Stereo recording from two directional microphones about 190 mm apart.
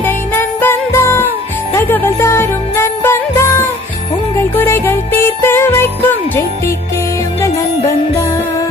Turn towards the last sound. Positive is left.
turn(degrees=15)  # may be behind; listen again after turning